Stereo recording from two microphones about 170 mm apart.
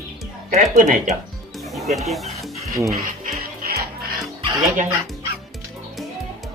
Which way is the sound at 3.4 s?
60° right (ahead or behind).